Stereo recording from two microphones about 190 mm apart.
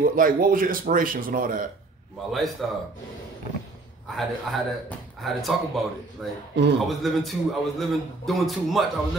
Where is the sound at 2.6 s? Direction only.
Centre (ahead or behind).